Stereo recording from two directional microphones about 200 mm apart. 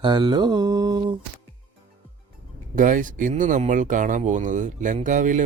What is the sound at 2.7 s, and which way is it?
Speech, 40° right (ahead or behind).